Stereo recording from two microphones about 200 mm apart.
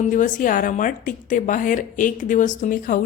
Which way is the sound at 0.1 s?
40° left (ahead or behind).